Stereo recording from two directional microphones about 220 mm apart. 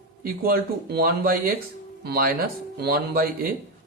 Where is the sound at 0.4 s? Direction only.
45° right (ahead or behind).